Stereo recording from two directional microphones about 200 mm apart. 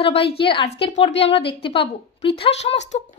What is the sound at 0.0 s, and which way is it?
A woman's voice, 30° left (ahead or behind).